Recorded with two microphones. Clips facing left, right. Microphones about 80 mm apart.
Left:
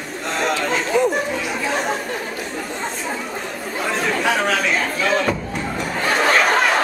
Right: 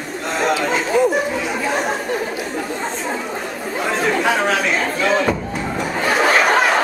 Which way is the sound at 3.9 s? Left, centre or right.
Centre.